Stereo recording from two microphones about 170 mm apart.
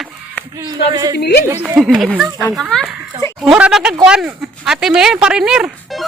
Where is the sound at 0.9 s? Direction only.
20° right (ahead or behind).